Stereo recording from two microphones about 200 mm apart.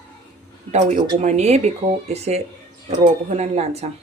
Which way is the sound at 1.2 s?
35° right (ahead or behind).